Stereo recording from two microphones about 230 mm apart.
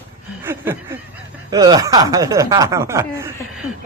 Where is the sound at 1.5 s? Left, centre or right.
Centre.